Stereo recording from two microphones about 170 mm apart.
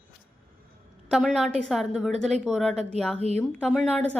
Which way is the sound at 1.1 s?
Centre (ahead or behind).